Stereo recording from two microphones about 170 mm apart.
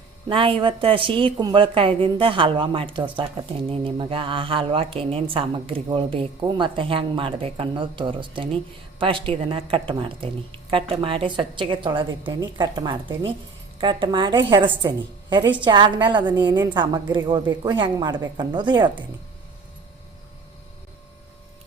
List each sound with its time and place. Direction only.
0.3 s a woman's voice: 30° right (ahead or behind)